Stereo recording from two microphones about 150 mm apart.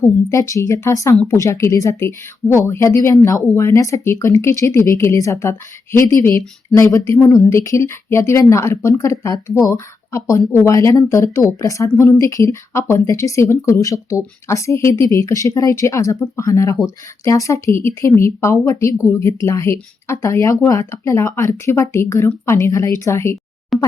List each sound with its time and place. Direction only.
0.0 s a woman's voice: 20° left (ahead or behind)
23.7 s plop: centre (ahead or behind)